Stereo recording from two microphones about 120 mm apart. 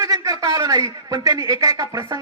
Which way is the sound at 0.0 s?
30° right (ahead or behind).